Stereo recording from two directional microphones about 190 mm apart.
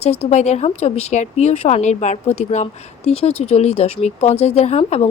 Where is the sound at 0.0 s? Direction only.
35° left (ahead or behind).